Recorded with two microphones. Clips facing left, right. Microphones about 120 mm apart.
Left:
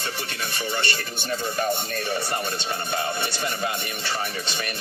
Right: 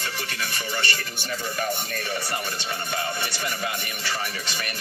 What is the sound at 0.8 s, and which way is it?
Speech, 25° left (ahead or behind).